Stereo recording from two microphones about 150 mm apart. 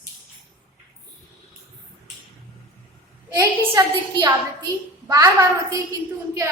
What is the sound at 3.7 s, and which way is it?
Speech, 25° right (ahead or behind).